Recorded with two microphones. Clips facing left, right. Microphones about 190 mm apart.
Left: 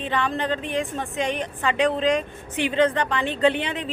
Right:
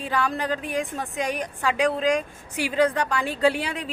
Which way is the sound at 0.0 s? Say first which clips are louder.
Left 1 dB; 5° right (ahead or behind).